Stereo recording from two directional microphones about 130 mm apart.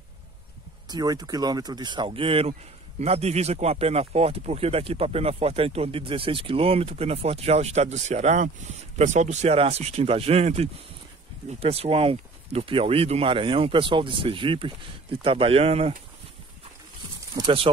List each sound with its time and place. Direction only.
0.8 s speech: 30° right (ahead or behind); by 15.9 s 50° right (ahead or behind)
17.4 s speech: 40° right (ahead or behind)